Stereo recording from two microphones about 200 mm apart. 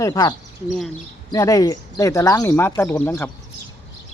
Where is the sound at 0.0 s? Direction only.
20° left (ahead or behind).